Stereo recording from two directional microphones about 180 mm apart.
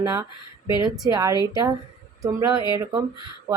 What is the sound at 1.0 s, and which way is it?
Speech, 20° right (ahead or behind).